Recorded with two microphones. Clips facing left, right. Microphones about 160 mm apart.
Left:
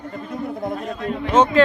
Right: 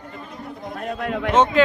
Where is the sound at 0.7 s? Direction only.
75° right (ahead or behind).